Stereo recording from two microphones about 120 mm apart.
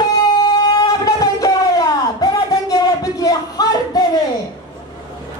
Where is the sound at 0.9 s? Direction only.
30° left (ahead or behind).